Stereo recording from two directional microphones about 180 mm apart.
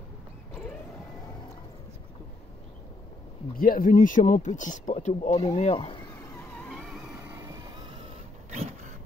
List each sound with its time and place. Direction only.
3.5 s speech: 50° left (ahead or behind); by 5.9 s 35° left (ahead or behind)
6.7 s vehicle: centre (ahead or behind); by 7.8 s 20° right (ahead or behind)
8.5 s vehicle: 40° right (ahead or behind)